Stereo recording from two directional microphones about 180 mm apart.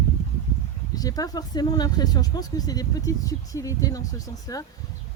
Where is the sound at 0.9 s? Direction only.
20° left (ahead or behind).